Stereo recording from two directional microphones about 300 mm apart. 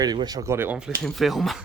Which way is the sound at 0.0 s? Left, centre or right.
Centre.